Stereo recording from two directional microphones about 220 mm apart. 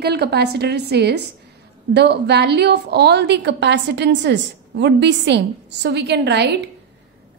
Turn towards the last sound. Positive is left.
turn(degrees=-50)  # may be behind; listen again after turning